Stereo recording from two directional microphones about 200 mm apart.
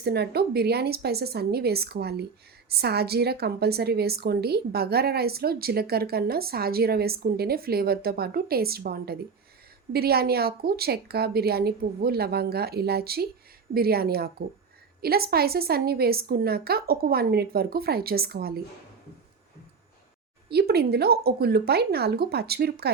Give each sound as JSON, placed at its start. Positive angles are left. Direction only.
{"t": 0.0, "sound": "a woman's voice", "side_deg": -55}
{"t": 20.5, "sound": "a woman's voice", "side_deg": -50}